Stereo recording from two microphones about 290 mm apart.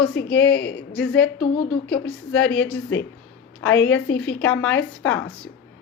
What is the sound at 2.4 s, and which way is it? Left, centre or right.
Speech, left.